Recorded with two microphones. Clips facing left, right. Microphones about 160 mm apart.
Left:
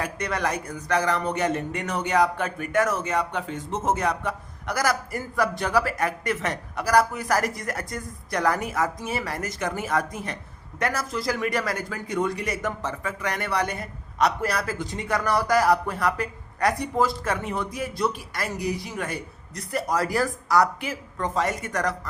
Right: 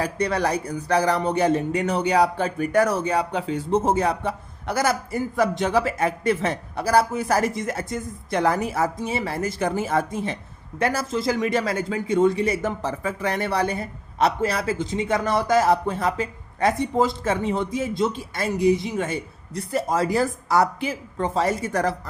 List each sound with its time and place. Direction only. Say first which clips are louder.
0.0 s speech: right 4 dB; 30° right (ahead or behind)